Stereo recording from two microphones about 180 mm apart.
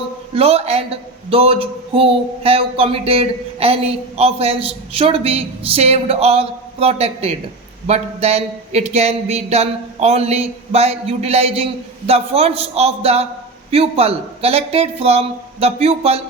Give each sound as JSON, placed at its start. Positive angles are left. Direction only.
{"t": 0.3, "sound": "a man's voice", "side_deg": -35}